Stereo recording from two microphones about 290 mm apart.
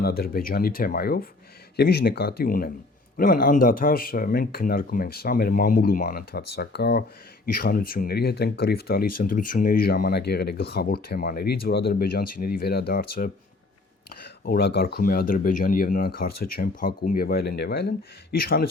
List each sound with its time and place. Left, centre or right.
0.0 s speech: left